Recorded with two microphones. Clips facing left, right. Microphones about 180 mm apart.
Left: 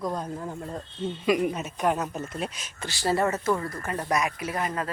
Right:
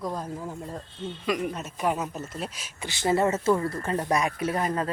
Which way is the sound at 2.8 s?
20° right (ahead or behind).